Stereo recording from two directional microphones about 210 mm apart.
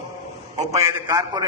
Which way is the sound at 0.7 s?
15° right (ahead or behind).